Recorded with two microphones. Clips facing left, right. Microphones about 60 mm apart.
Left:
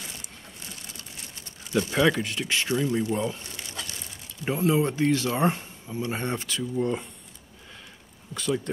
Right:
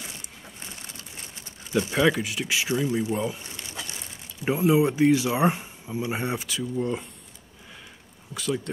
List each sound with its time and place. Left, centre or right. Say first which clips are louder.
1.7 s speech: even; centre
3.4 s crumpling: even; centre
4.5 s speech: right 3 dB; centre